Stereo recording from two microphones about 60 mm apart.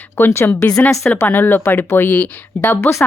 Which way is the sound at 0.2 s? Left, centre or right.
Left.